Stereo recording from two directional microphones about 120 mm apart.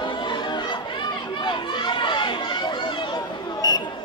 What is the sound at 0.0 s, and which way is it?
Chatter, 40° left (ahead or behind).